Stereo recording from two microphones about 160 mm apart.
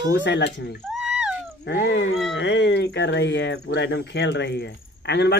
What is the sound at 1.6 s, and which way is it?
Speech, 90° left.